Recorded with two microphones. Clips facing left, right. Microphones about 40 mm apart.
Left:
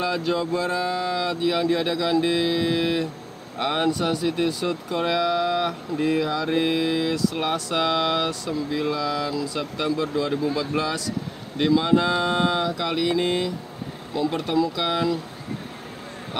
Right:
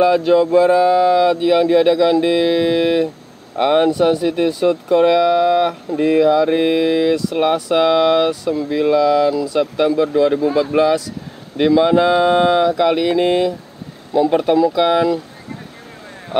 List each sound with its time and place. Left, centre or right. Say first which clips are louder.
0.0 s speech: right 11 dB; centre